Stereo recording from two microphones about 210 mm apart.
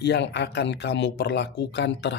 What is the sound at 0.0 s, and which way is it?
Speech, 55° left (ahead or behind).